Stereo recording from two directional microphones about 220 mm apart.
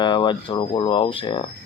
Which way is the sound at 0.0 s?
20° left (ahead or behind).